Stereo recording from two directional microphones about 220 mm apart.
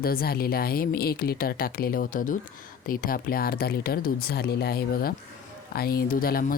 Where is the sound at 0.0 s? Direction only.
45° left (ahead or behind).